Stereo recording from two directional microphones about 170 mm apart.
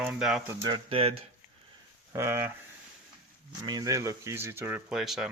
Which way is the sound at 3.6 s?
20° right (ahead or behind).